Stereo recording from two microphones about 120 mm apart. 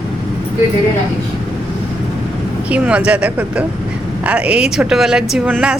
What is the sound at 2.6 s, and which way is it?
A woman's voice, 10° right (ahead or behind).